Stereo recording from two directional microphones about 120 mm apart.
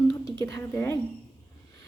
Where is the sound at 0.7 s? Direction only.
20° left (ahead or behind).